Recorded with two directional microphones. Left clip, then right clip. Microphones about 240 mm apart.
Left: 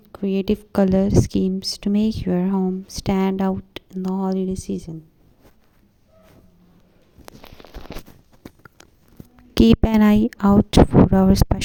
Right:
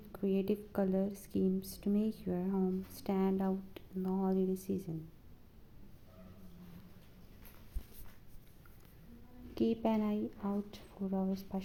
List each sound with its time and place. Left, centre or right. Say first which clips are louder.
0.1 s a woman's voice: left 12 dB; left
9.6 s speech: left 17 dB; left